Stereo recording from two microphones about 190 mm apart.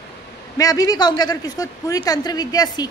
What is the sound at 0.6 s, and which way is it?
A woman's voice, 20° left (ahead or behind).